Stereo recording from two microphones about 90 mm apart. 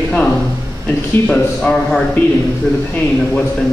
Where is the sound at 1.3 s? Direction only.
10° left (ahead or behind).